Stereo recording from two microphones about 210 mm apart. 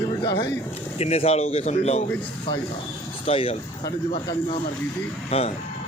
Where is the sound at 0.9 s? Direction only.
30° left (ahead or behind).